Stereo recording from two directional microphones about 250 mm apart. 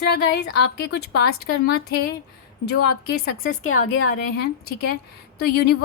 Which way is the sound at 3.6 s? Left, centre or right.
Left.